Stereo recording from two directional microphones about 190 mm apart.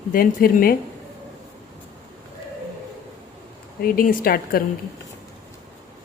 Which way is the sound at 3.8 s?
50° left (ahead or behind).